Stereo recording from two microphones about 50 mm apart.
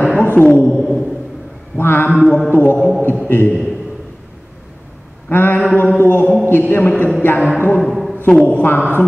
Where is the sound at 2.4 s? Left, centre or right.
Left.